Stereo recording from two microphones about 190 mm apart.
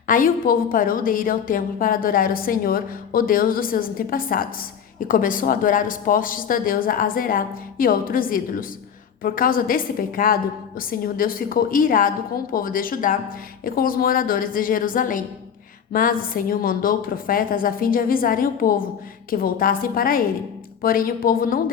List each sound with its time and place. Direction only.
0.1 s a woman's voice: 45° left (ahead or behind)